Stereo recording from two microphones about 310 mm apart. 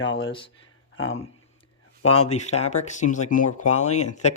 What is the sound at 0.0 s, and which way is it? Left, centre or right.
Speech, left.